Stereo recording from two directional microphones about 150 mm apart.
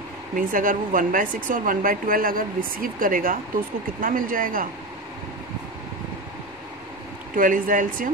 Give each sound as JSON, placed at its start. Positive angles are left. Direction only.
{"t": 0.5, "sound": "speech", "side_deg": -65}
{"t": 7.3, "sound": "speech", "side_deg": -65}